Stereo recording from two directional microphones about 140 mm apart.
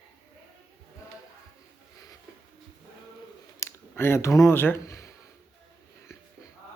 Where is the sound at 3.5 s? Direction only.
20° left (ahead or behind).